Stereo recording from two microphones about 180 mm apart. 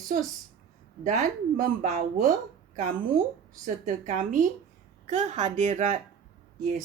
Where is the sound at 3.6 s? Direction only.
45° right (ahead or behind).